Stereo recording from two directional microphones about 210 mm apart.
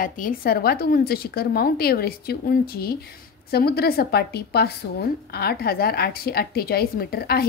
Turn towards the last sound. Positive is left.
turn(degrees=50)  # may be behind; listen again after turning